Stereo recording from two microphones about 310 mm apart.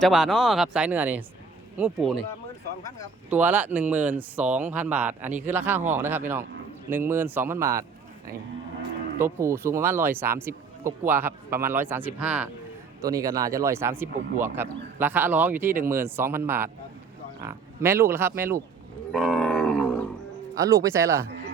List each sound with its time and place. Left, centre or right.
0.0 s speech: centre
3.2 s speech: centre
9.2 s speech: centre
19.1 s wild animals: centre
20.6 s speech: centre